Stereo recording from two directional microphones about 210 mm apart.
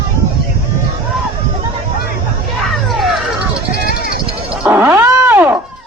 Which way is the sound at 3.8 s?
45° left (ahead or behind).